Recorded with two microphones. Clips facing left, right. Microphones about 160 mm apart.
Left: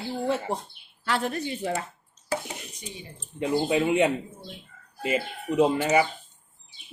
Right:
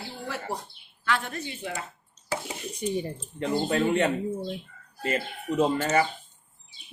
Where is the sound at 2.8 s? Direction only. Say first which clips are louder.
Right 13 dB; 50° right (ahead or behind).